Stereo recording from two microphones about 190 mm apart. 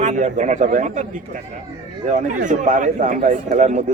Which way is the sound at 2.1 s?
40° right (ahead or behind).